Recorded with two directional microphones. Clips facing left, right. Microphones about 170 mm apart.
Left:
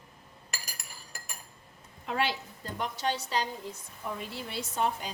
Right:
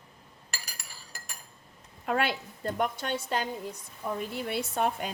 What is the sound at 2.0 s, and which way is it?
A woman's voice, 55° right (ahead or behind).